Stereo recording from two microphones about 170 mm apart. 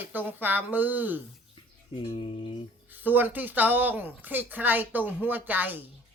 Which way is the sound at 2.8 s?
10° right (ahead or behind).